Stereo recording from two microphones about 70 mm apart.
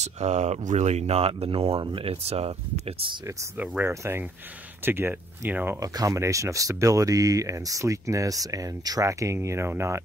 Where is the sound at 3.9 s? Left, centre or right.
Right.